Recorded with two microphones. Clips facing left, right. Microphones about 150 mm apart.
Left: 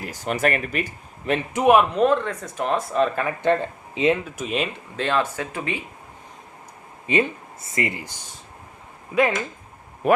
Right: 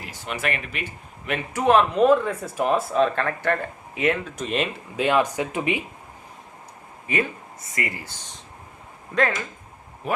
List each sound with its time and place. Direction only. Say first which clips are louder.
0.0 s speech: left 6 dB; 45° left (ahead or behind)
1.5 s speech: left 2 dB; 15° left (ahead or behind)
1.9 s speech: right 2 dB; centre (ahead or behind)
3.4 s speech: left 4 dB; 20° left (ahead or behind)
4.2 s speech: even; 5° left (ahead or behind)
4.9 s speech: right 2 dB; 15° right (ahead or behind)
7.1 s speech: left 4 dB; 20° left (ahead or behind)
9.1 s speech: left 3 dB; 5° left (ahead or behind)
10.0 s speech: left 8 dB; 60° left (ahead or behind)